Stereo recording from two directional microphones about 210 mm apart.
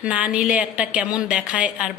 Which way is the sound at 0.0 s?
5° right (ahead or behind).